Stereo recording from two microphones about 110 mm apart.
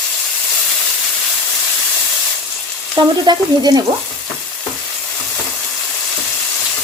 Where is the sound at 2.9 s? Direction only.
40° right (ahead or behind).